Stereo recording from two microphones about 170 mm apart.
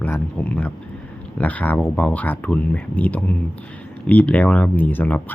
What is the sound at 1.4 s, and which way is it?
Speech, 10° left (ahead or behind).